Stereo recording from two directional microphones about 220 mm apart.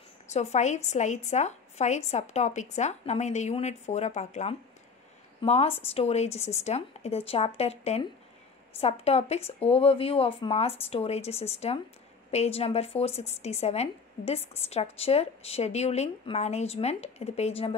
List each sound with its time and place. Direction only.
0.3 s a woman's voice: 30° left (ahead or behind)